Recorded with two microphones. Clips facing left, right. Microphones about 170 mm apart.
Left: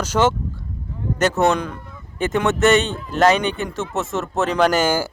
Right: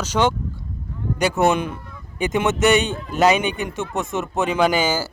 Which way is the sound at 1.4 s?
20° right (ahead or behind).